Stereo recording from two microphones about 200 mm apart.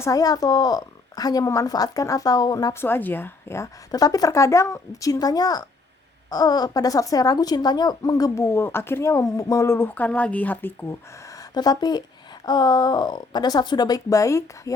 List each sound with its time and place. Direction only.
0.0 s a woman's voice: 15° left (ahead or behind)